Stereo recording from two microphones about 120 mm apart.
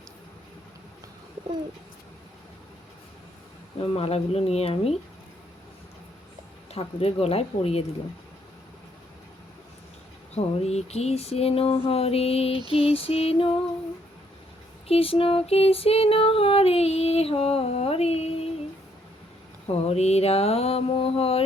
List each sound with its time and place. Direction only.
3.8 s female singing: 55° left (ahead or behind)
6.7 s female singing: 55° left (ahead or behind)
10.3 s female singing: 60° left (ahead or behind)
14.8 s female singing: 50° left (ahead or behind)
19.6 s female singing: 60° left (ahead or behind)